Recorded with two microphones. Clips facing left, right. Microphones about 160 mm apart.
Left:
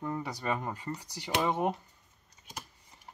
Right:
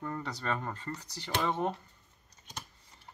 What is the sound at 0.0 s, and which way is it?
Speech, 15° left (ahead or behind).